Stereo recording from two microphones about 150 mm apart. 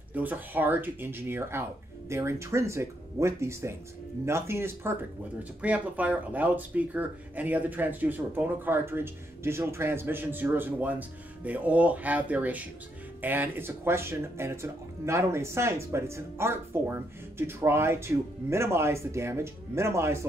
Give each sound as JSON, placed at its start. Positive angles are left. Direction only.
{"t": 0.1, "sound": "speech", "side_deg": -10}